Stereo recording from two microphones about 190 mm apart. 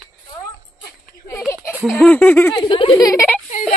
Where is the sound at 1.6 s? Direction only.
5° right (ahead or behind).